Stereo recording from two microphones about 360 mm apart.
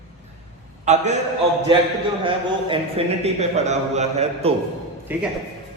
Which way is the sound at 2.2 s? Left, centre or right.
Centre.